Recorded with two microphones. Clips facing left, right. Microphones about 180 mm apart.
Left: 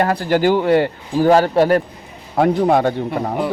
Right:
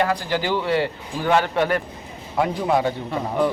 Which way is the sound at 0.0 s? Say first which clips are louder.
Left 6 dB; 50° left (ahead or behind).